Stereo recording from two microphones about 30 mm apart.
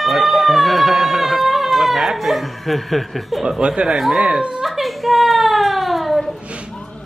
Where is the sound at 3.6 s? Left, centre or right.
Right.